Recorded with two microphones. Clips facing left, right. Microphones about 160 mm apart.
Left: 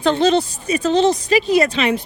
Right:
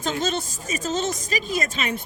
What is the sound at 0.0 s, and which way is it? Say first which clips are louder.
Speech: left 10 dB; 45° right (ahead or behind).